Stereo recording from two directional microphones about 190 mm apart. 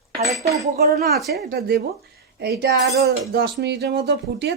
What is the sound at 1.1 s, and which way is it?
Speech, centre (ahead or behind).